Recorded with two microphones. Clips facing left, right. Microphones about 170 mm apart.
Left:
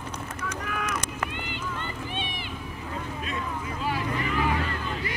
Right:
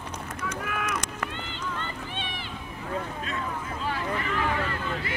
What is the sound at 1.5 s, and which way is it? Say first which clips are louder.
Run: even; 15° left (ahead or behind).